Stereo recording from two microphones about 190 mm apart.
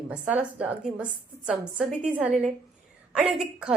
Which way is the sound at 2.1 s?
5° right (ahead or behind).